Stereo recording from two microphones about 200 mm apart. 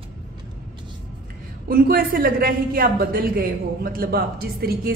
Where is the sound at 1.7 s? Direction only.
45° right (ahead or behind).